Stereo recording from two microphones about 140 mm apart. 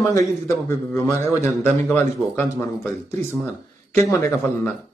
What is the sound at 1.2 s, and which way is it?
Speech, 55° right (ahead or behind).